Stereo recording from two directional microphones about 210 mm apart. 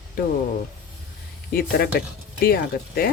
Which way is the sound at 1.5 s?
45° left (ahead or behind).